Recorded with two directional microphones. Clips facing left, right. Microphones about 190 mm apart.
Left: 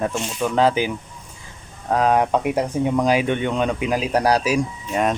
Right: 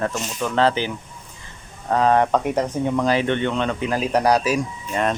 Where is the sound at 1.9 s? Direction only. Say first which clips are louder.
Even; 10° left (ahead or behind).